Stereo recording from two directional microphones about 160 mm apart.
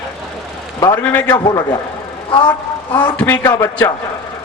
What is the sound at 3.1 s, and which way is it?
Speech, 10° left (ahead or behind).